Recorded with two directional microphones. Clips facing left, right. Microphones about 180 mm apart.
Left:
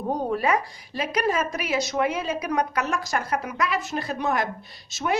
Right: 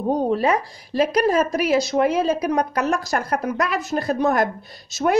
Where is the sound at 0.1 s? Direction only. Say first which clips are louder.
Right 4 dB; 25° right (ahead or behind).